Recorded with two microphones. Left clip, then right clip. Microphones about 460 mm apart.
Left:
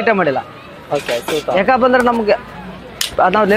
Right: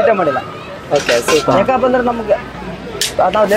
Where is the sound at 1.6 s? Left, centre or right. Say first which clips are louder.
Left 1 dB; left.